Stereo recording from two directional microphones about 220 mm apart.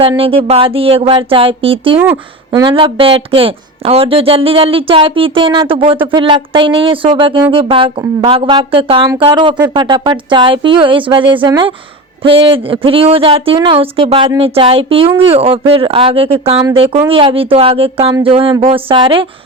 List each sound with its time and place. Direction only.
0.0 s speech: 25° right (ahead or behind)